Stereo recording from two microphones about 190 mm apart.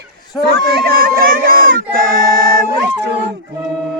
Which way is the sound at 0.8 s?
55° right (ahead or behind).